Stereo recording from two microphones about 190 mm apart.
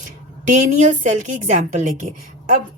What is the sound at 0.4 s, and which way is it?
A woman's voice, 40° right (ahead or behind).